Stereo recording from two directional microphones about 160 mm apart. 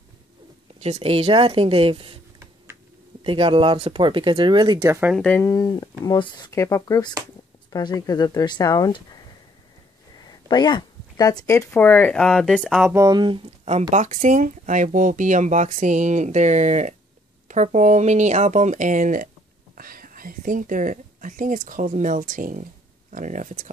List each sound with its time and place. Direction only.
0.7 s speech: 40° right (ahead or behind)
3.3 s speech: 35° right (ahead or behind)
4.8 s speech: 20° right (ahead or behind)
5.1 s speech: 5° left (ahead or behind)
5.4 s speech: 20° left (ahead or behind); by 12.7 s 5° left (ahead or behind)
12.7 s speech: 10° right (ahead or behind)
13.0 s speech: 30° right (ahead or behind)
13.8 s speech: 50° right (ahead or behind)
19.8 s speech: 65° right (ahead or behind)